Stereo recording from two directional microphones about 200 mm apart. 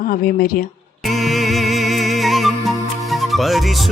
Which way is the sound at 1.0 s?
Centre (ahead or behind).